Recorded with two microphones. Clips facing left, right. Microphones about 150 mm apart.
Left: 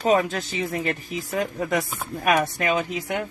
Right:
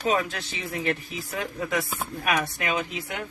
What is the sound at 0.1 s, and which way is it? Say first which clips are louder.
Speech: left 6 dB; 40° left (ahead or behind).